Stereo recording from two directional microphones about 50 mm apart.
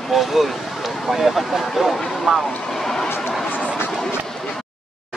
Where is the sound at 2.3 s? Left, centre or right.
Centre.